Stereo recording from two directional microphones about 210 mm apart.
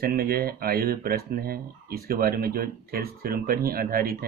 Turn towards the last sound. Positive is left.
turn(degrees=-45)  # may be behind; listen again after turning